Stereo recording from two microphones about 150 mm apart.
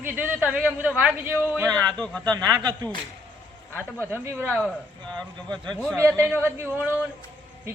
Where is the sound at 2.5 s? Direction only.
25° right (ahead or behind).